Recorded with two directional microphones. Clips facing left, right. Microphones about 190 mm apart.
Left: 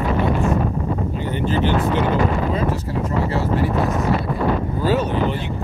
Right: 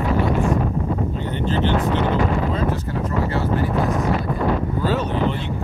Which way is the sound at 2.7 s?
30° left (ahead or behind).